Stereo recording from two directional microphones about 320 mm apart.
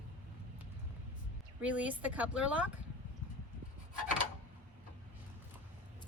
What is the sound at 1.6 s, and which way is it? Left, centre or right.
A woman's voice, centre.